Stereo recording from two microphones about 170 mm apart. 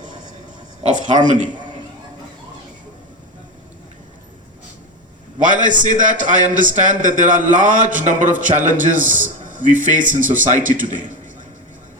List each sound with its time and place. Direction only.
0.8 s speech: 45° right (ahead or behind)
5.4 s speech: 50° right (ahead or behind)